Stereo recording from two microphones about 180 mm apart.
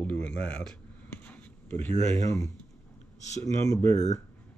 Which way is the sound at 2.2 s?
20° left (ahead or behind).